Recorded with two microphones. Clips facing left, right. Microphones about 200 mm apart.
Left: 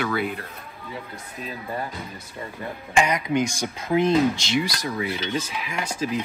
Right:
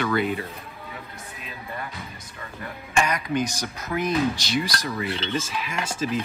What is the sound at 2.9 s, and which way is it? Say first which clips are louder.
Speech: left 2 dB; 20° left (ahead or behind).